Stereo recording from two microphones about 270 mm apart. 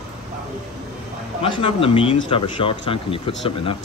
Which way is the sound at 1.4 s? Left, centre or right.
Centre.